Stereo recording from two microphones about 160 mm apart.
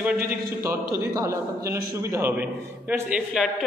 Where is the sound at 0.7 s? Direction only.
20° right (ahead or behind).